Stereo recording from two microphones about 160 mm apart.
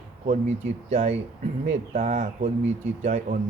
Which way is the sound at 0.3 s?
45° right (ahead or behind).